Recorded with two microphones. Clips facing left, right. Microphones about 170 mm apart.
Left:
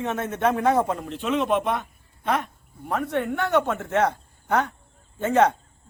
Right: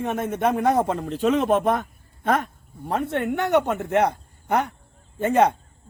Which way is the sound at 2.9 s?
25° right (ahead or behind).